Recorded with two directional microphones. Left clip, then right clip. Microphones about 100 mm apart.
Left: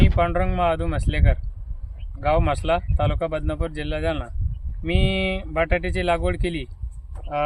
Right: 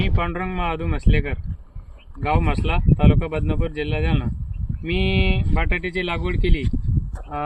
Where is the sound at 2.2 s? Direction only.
45° left (ahead or behind).